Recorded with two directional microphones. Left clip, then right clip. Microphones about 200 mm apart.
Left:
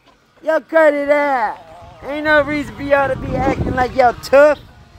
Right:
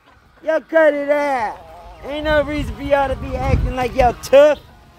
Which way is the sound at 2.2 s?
35° left (ahead or behind).